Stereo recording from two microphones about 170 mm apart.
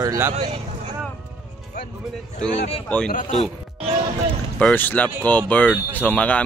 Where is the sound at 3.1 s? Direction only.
50° left (ahead or behind).